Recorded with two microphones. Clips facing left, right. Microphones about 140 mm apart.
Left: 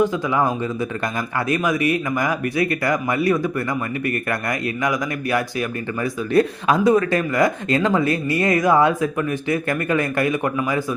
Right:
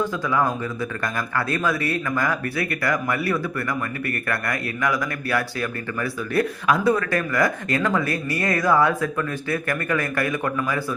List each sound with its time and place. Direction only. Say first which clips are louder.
0.0 s a man's voice: left 3 dB; 20° left (ahead or behind)